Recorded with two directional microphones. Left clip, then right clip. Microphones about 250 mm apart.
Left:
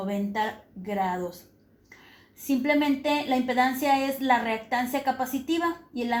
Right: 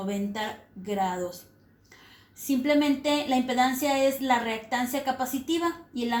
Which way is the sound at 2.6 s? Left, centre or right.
Centre.